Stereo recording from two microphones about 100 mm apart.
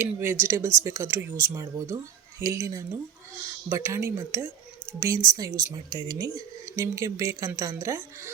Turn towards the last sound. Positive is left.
turn(degrees=-30)  # may be behind; listen again after turning